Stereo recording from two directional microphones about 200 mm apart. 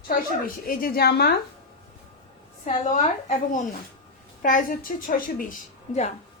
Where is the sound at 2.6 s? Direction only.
35° left (ahead or behind).